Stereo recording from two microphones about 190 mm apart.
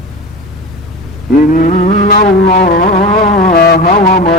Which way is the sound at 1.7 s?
35° left (ahead or behind).